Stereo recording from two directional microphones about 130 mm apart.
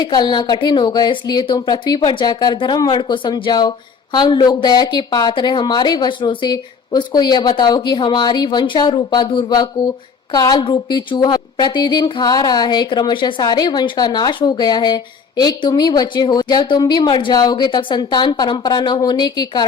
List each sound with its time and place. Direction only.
0.0 s a woman's voice: 35° left (ahead or behind)